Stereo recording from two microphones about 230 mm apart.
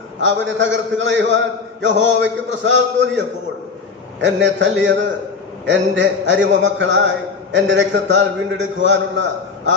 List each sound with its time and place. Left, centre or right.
0.2 s a man's voice: right